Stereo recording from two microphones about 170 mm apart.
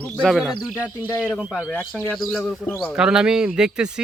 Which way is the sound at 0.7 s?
10° left (ahead or behind).